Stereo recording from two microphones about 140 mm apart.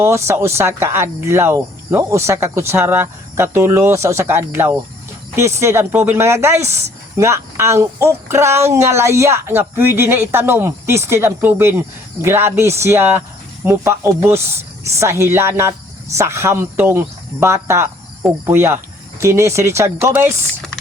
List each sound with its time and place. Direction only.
0.0 s speech: 20° right (ahead or behind)
18.2 s cricket: 15° right (ahead or behind)
19.2 s speech: 20° right (ahead or behind)